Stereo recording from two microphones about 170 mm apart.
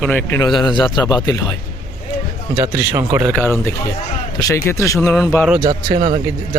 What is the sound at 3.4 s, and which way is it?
Speech, 15° left (ahead or behind).